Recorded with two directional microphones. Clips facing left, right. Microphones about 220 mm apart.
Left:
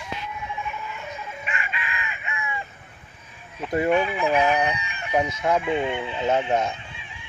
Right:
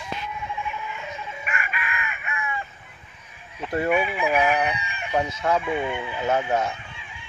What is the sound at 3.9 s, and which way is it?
Fowl, 5° right (ahead or behind).